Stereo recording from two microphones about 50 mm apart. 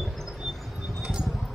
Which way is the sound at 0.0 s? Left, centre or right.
Centre.